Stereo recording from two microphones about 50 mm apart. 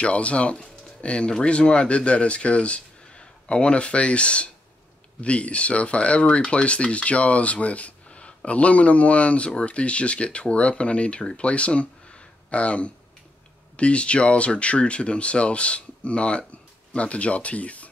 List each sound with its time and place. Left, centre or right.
0.0 s speech: left